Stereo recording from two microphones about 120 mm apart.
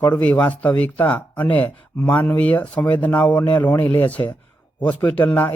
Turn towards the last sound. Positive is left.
turn(degrees=15)  # may be behind; listen again after turning